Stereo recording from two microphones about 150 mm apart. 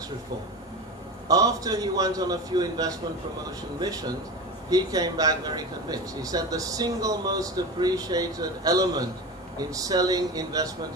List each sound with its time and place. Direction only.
1.3 s speech: 25° right (ahead or behind)